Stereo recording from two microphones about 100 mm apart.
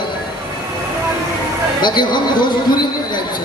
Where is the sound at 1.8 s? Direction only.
50° left (ahead or behind).